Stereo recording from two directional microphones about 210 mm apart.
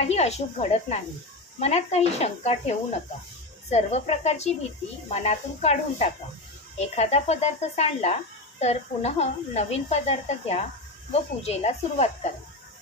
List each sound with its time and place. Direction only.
0.0 s speech: 30° left (ahead or behind)
3.7 s speech: 30° left (ahead or behind)